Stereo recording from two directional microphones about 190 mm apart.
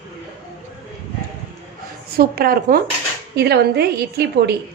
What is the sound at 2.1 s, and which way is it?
A woman's voice, 50° right (ahead or behind).